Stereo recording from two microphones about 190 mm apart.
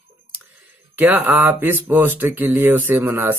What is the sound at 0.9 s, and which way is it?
Speech, 10° right (ahead or behind).